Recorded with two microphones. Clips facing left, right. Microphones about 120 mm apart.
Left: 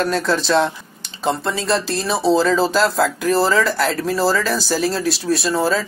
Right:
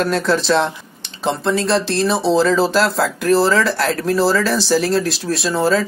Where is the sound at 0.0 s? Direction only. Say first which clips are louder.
Right 2 dB; centre (ahead or behind).